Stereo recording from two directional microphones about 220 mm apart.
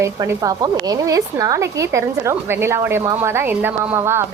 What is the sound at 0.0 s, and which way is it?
A woman's voice, 15° right (ahead or behind).